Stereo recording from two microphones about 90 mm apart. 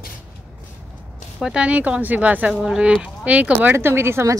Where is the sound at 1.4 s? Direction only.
10° right (ahead or behind).